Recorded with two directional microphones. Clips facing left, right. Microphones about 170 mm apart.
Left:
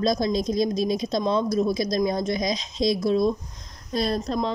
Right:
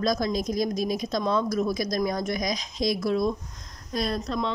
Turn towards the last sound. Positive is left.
turn(degrees=35)  # may be behind; listen again after turning